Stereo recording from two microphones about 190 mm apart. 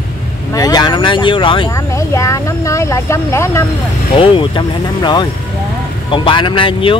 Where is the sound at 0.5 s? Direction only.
20° left (ahead or behind).